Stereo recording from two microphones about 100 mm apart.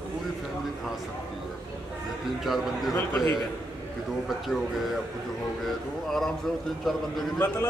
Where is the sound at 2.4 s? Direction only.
Centre (ahead or behind).